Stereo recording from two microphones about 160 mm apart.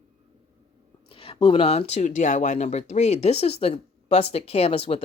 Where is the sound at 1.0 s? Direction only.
35° left (ahead or behind).